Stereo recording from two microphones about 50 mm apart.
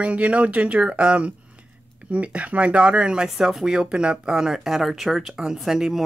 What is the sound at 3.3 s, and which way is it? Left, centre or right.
Speech, centre.